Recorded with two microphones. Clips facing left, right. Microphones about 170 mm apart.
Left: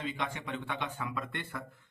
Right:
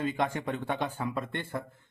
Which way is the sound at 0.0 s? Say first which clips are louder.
Right 7 dB; 45° right (ahead or behind).